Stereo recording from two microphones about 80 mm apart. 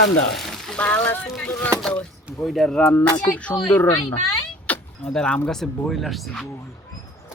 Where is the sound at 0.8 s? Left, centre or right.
Centre.